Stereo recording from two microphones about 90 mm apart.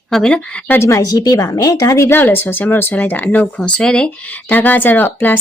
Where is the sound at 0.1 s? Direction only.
10° left (ahead or behind).